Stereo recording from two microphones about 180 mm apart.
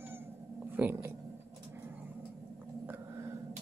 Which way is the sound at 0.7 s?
10° right (ahead or behind).